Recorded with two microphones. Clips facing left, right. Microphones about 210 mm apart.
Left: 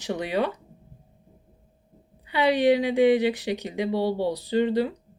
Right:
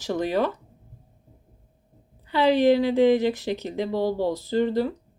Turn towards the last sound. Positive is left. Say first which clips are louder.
# even
turn(degrees=15)  # may be behind; listen again after turning